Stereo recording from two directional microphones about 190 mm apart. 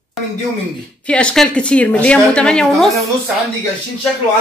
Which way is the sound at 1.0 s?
5° left (ahead or behind).